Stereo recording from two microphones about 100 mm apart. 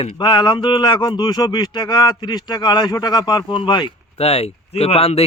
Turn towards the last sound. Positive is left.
turn(degrees=90)